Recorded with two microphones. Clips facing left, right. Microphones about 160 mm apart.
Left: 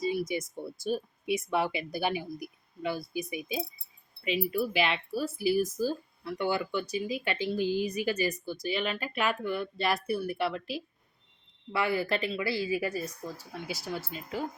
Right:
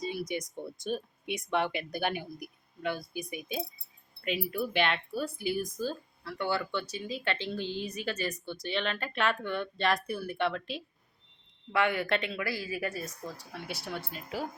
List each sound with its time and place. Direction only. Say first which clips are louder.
0.0 s speech: left 4 dB; 5° left (ahead or behind)
12.3 s speech: left 5 dB; 25° left (ahead or behind)
12.9 s speech: left 3 dB; centre (ahead or behind)